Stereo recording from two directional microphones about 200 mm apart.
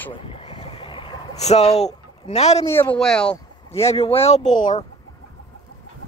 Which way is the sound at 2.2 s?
35° left (ahead or behind).